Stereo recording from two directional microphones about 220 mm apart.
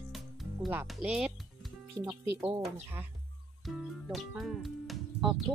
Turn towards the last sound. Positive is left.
turn(degrees=0)  # may be behind; listen again after turning